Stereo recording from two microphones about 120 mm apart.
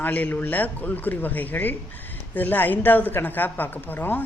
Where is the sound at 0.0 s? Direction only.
15° left (ahead or behind).